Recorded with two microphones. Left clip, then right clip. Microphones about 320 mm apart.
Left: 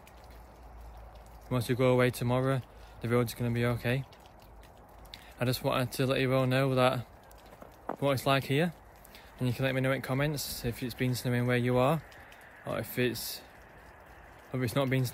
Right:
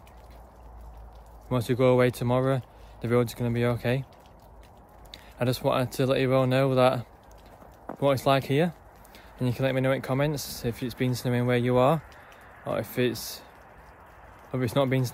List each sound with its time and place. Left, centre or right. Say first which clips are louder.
1.5 s speech: right 5 dB; centre
5.4 s speech: right 5 dB; centre
14.5 s speech: right 5 dB; centre